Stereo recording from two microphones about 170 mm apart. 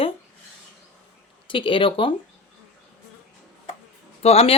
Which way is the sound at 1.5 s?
30° left (ahead or behind).